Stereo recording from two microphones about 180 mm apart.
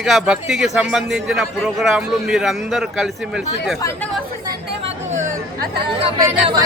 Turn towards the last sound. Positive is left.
turn(degrees=-20)  # may be behind; listen again after turning